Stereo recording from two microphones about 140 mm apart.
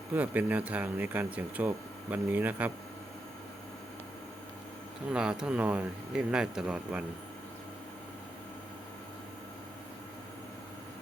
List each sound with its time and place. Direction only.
0.1 s speech: 10° right (ahead or behind)
5.1 s speech: 5° right (ahead or behind)